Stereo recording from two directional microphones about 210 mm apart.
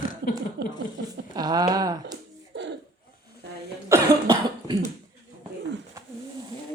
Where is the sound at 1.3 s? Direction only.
20° right (ahead or behind).